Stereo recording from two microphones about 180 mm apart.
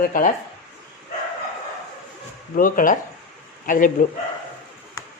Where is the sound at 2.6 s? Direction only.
50° left (ahead or behind).